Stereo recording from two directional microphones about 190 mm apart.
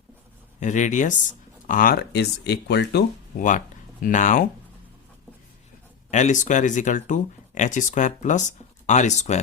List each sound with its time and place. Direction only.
0.6 s speech: 40° left (ahead or behind); by 3.4 s 60° left (ahead or behind)
4.0 s speech: 40° left (ahead or behind)
6.1 s speech: 40° left (ahead or behind)